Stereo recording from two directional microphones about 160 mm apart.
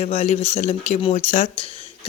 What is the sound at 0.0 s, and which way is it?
A woman's voice, 45° left (ahead or behind).